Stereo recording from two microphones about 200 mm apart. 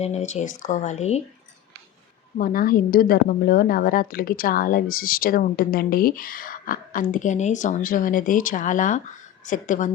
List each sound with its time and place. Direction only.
0.0 s speech: 35° left (ahead or behind)
2.4 s a woman's voice: 45° left (ahead or behind)